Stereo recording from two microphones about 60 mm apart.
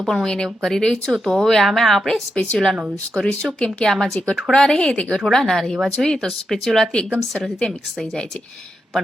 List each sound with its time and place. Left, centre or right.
0.0 s speech: centre
2.3 s speech: centre